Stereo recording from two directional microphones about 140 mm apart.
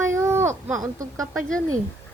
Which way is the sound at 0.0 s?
20° right (ahead or behind).